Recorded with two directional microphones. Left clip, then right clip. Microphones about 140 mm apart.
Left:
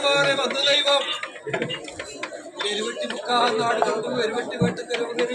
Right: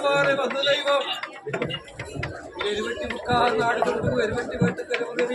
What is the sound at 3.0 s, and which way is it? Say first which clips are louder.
A man's voice: left 1 dB; 25° left (ahead or behind).